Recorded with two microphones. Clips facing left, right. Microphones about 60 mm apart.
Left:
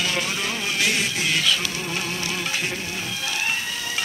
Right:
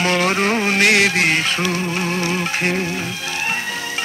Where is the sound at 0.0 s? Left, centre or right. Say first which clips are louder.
Right 9 dB; right.